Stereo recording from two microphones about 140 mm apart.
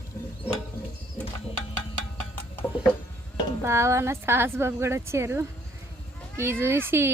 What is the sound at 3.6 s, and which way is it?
A woman's voice, 20° right (ahead or behind).